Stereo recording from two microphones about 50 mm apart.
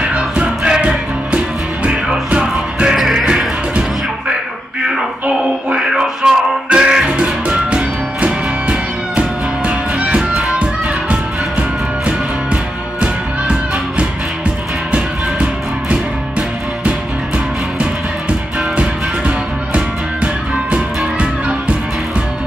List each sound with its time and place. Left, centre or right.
0.0 s music: right
3.0 s music: centre
5.7 s music: centre
13.0 s music: right
18.6 s music: right